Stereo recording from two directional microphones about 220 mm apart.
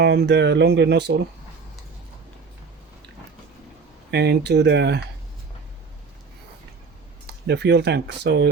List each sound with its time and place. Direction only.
0.0 s speech: 50° right (ahead or behind)
4.1 s speech: 50° right (ahead or behind)
7.3 s speech: 50° right (ahead or behind)